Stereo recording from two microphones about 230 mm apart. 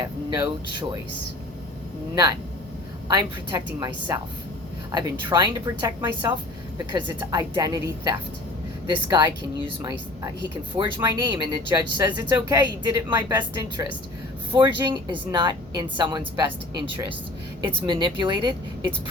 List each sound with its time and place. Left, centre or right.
0.0 s speech: centre
3.1 s speech: centre
17.6 s speech: right